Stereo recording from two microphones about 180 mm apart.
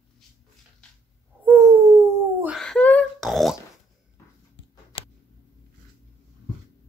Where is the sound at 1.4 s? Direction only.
15° right (ahead or behind).